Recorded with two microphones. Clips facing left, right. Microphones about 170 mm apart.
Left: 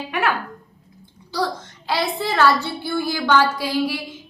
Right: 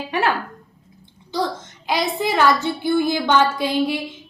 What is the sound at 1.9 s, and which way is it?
A woman's voice, 15° right (ahead or behind).